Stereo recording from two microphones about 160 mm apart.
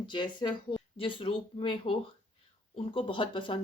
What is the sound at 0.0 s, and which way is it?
Speech, 30° left (ahead or behind).